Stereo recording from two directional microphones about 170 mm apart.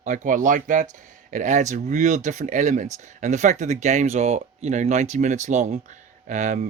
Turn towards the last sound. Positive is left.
turn(degrees=-45)  # may be behind; listen again after turning